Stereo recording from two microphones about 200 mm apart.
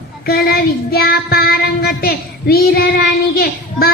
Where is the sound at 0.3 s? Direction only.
50° left (ahead or behind).